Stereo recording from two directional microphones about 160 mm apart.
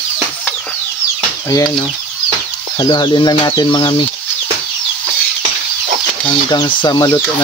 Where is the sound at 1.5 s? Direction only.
25° left (ahead or behind).